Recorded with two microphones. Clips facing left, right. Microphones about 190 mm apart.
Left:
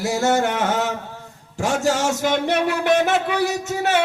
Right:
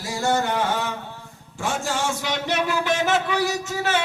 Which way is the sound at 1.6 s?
40° left (ahead or behind).